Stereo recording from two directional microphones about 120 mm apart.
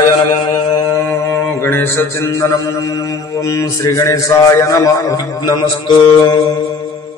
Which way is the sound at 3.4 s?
25° left (ahead or behind).